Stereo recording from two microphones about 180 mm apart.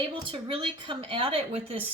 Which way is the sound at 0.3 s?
30° right (ahead or behind).